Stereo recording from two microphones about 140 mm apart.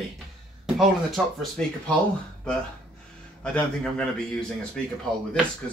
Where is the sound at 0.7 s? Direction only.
Centre (ahead or behind).